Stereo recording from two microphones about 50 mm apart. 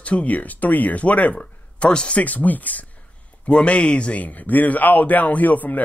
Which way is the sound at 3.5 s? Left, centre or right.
Left.